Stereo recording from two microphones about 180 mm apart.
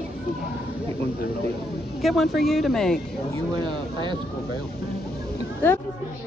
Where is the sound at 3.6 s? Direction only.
25° right (ahead or behind).